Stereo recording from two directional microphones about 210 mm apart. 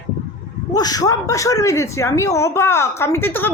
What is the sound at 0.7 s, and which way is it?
Speech, 15° left (ahead or behind).